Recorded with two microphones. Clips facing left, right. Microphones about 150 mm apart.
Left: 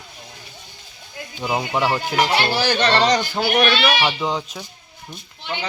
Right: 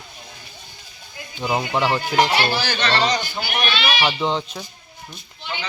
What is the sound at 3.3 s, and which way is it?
Speech, 75° left (ahead or behind).